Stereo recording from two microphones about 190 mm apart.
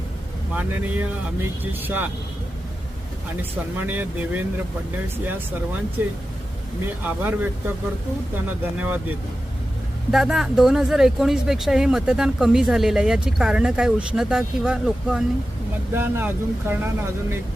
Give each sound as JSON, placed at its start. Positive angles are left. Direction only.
{"t": 0.5, "sound": "speech", "side_deg": -10}
{"t": 3.8, "sound": "speech", "side_deg": -10}
{"t": 8.8, "sound": "speech", "side_deg": -10}